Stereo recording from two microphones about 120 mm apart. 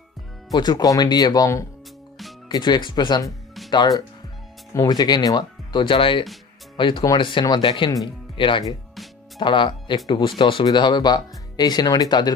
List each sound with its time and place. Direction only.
0.5 s speech: 35° left (ahead or behind)
2.4 s speech: 35° left (ahead or behind)
4.7 s speech: 35° left (ahead or behind)